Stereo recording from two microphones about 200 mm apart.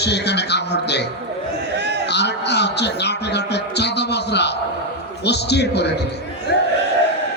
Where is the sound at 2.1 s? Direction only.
60° left (ahead or behind).